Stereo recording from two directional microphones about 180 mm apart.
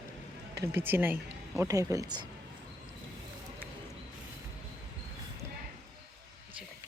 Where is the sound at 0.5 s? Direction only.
15° right (ahead or behind).